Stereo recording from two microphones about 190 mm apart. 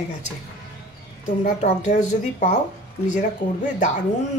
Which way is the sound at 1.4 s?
40° left (ahead or behind).